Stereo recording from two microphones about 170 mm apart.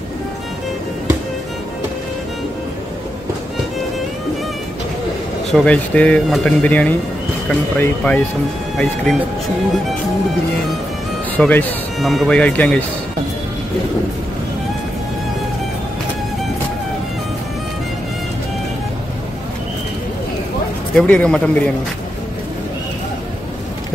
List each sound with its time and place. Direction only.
5.5 s speech: 5° left (ahead or behind)
11.3 s speech: 10° left (ahead or behind)
20.9 s speech: 5° left (ahead or behind)